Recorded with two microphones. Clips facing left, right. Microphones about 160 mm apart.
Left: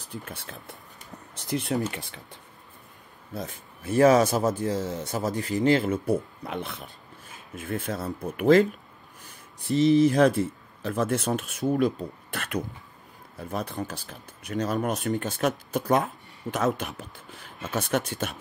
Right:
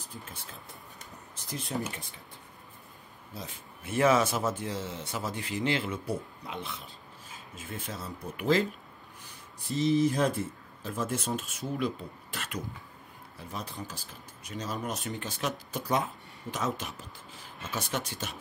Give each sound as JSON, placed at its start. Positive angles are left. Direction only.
{"t": 0.1, "sound": "speech", "side_deg": 70}
{"t": 3.3, "sound": "speech", "side_deg": 40}
{"t": 9.7, "sound": "speech", "side_deg": 70}
{"t": 11.7, "sound": "speech", "side_deg": 45}